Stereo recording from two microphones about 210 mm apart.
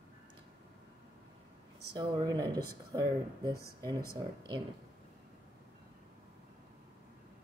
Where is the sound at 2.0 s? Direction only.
15° right (ahead or behind).